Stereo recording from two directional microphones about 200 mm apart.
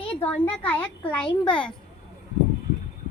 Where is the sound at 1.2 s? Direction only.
25° left (ahead or behind).